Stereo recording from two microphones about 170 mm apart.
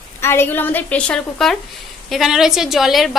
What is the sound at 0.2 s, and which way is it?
A woman's voice, 15° left (ahead or behind).